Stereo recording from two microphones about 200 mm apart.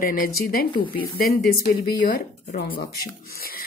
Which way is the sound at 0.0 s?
45° left (ahead or behind).